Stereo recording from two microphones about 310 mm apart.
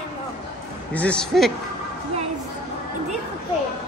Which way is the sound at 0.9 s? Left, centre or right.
Centre.